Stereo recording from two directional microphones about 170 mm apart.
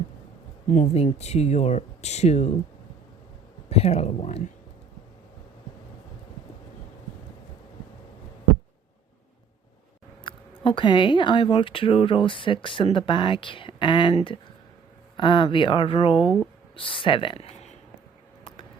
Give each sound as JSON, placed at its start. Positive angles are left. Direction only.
{"t": 0.7, "sound": "speech", "side_deg": 45}
{"t": 3.7, "sound": "speech", "side_deg": 35}
{"t": 10.2, "sound": "speech", "side_deg": 30}